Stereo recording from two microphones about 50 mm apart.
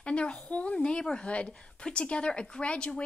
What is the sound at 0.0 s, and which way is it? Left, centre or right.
Speech, left.